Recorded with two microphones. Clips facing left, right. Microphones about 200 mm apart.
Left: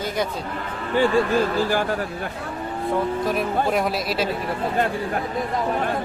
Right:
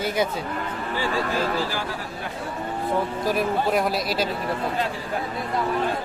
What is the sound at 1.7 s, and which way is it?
Speech, 55° left (ahead or behind).